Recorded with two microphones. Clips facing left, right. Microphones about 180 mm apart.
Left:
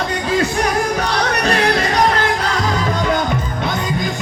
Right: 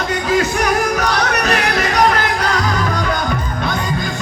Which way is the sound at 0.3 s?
30° left (ahead or behind).